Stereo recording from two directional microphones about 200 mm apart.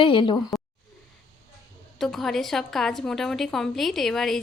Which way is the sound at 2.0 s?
Centre (ahead or behind).